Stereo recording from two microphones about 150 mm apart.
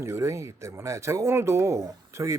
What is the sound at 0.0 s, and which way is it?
Speech, 20° right (ahead or behind).